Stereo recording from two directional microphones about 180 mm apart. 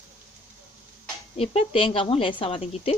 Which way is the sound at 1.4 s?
30° left (ahead or behind).